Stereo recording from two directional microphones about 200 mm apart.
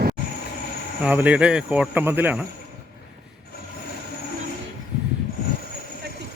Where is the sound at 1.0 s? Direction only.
5° right (ahead or behind).